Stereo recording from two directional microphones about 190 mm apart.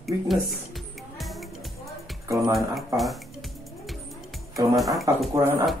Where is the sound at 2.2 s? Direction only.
15° right (ahead or behind).